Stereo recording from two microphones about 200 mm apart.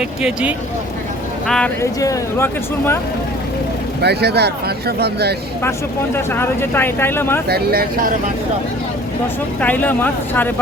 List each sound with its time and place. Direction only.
0.0 s speech: 5° right (ahead or behind)
1.5 s speech: 5° left (ahead or behind)
4.0 s speech: 55° right (ahead or behind)
6.1 s speech: 10° left (ahead or behind)
7.4 s speech: 50° right (ahead or behind)
9.6 s speech: 10° left (ahead or behind)